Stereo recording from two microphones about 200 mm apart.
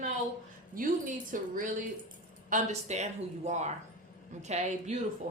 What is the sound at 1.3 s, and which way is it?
Speech, 40° right (ahead or behind).